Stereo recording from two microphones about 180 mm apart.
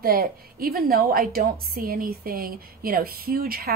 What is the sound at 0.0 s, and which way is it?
A woman's voice, 55° right (ahead or behind).